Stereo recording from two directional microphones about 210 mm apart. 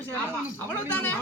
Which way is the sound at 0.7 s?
10° left (ahead or behind).